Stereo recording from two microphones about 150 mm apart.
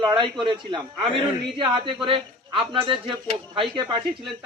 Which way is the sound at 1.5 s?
35° right (ahead or behind).